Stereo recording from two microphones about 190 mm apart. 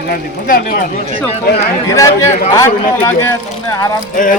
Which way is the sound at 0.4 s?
50° left (ahead or behind).